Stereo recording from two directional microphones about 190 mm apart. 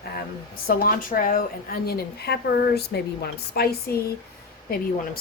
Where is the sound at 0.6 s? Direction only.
50° left (ahead or behind).